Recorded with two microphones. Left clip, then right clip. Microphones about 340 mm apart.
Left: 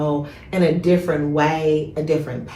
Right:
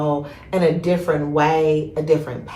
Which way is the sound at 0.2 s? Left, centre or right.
Centre.